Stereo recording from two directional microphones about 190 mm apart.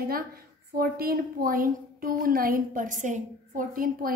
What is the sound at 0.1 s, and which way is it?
A woman's voice, 50° right (ahead or behind).